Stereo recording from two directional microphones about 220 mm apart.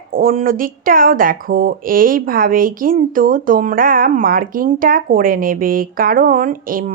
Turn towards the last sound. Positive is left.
turn(degrees=-40)  # may be behind; listen again after turning